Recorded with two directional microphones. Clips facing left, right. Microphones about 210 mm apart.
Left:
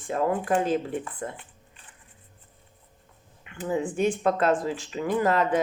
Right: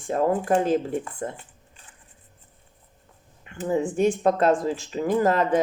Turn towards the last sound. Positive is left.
turn(degrees=-40)  # may be behind; listen again after turning